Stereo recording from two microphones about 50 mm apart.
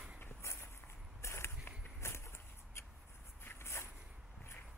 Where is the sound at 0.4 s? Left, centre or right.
Left.